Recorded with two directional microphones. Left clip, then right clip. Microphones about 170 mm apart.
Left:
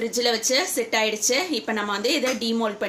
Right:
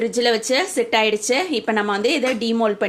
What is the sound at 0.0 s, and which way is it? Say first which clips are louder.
A woman's voice: right 4 dB; 50° right (ahead or behind).